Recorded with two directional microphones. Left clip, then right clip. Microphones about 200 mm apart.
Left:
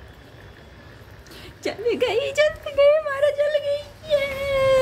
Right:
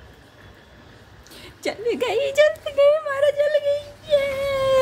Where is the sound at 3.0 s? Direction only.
20° right (ahead or behind).